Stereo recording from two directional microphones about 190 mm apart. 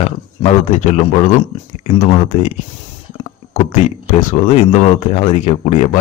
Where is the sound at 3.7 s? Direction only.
40° left (ahead or behind).